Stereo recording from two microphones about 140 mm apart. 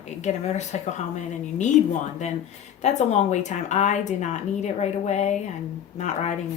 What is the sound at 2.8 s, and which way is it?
A woman's voice, 55° left (ahead or behind).